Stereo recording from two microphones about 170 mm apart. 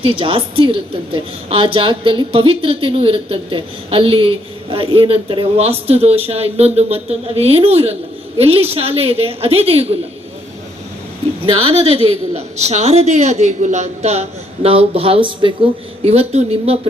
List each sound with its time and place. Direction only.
0.0 s a woman's voice: 35° right (ahead or behind)
11.4 s a woman's voice: 35° right (ahead or behind)